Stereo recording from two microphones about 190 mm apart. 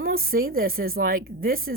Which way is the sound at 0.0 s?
50° right (ahead or behind).